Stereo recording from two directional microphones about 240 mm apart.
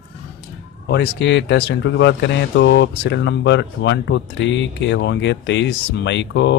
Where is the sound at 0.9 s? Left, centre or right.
Left.